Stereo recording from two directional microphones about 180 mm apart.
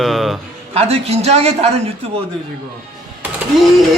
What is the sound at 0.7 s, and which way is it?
A man's voice, 35° right (ahead or behind).